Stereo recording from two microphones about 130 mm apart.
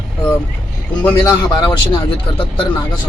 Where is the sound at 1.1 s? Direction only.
30° left (ahead or behind).